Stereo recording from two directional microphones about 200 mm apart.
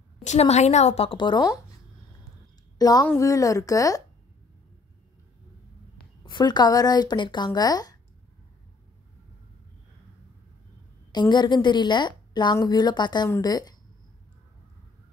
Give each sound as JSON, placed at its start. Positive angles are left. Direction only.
{"t": 0.2, "sound": "a woman's voice", "side_deg": 35}
{"t": 2.8, "sound": "a woman's voice", "side_deg": 20}
{"t": 6.2, "sound": "a woman's voice", "side_deg": 20}
{"t": 11.1, "sound": "a woman's voice", "side_deg": 20}